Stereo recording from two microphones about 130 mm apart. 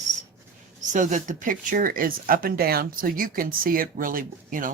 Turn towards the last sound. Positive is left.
turn(degrees=-90)